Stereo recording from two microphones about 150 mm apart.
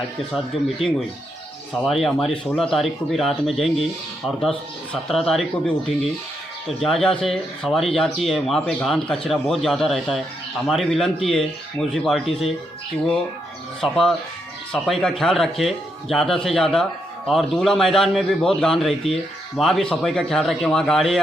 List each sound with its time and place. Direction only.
0.3 s speech: centre (ahead or behind)
13.8 s speech: centre (ahead or behind)